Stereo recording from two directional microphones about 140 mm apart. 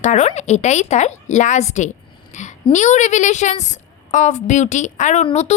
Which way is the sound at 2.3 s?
60° left (ahead or behind).